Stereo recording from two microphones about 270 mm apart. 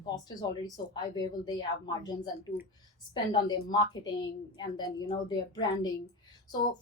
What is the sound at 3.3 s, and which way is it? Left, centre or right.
Speech, centre.